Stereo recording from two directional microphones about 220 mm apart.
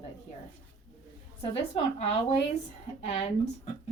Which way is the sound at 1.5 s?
25° left (ahead or behind).